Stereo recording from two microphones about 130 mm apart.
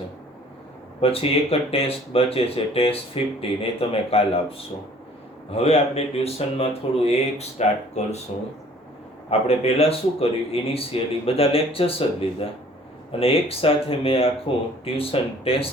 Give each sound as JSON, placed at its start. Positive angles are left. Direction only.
{"t": 1.0, "sound": "speech", "side_deg": 50}
{"t": 9.3, "sound": "speech", "side_deg": 50}